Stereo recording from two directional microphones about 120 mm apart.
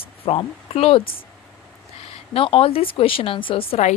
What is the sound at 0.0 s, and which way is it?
Speech, 50° left (ahead or behind).